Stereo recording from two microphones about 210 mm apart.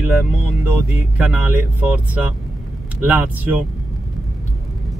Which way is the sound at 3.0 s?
5° right (ahead or behind).